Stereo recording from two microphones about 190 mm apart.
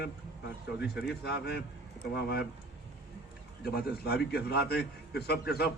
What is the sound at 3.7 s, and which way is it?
A man's voice, 55° left (ahead or behind).